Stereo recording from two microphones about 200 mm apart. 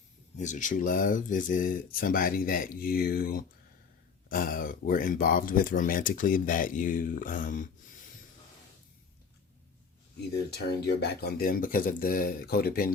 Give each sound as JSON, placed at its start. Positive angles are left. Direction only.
{"t": 0.3, "sound": "speech", "side_deg": 40}
{"t": 10.6, "sound": "speech", "side_deg": 55}